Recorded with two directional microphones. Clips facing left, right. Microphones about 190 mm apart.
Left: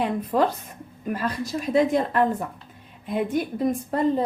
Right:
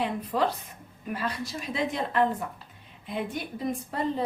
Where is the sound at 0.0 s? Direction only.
45° left (ahead or behind).